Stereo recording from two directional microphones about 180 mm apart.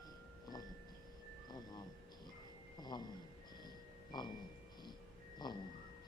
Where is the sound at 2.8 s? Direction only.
25° left (ahead or behind).